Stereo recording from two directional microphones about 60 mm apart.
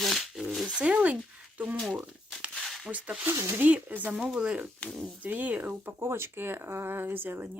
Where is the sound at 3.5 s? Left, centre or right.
Right.